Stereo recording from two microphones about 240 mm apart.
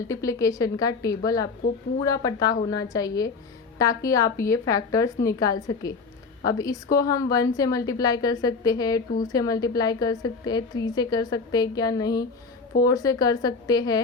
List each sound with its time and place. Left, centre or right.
0.1 s a woman's voice: centre